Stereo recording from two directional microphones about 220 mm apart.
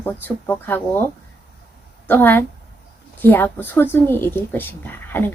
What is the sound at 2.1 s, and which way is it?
A woman's voice, 10° left (ahead or behind).